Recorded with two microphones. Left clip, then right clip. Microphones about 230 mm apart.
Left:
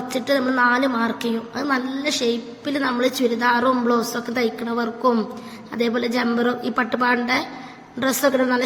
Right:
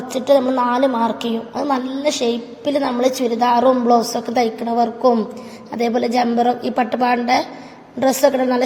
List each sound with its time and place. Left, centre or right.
0.1 s a woman's voice: centre